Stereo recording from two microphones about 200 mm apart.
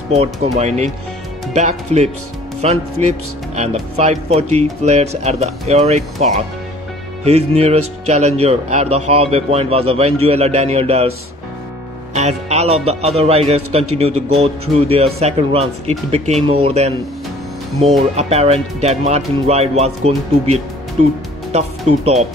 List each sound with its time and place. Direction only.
0.1 s speech: 30° right (ahead or behind)
12.1 s speech: 35° right (ahead or behind)
18.1 s speech: 30° right (ahead or behind)
21.0 s speech: 35° right (ahead or behind)